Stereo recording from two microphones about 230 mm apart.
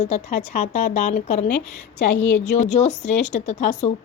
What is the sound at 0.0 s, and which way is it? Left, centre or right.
Speech, left.